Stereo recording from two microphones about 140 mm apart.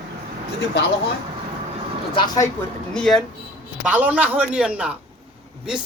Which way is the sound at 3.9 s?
10° right (ahead or behind).